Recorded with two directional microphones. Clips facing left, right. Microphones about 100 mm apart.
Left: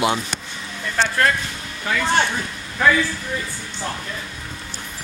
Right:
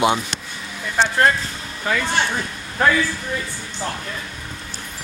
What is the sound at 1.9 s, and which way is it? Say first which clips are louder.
Speech: right 2 dB; 35° right (ahead or behind).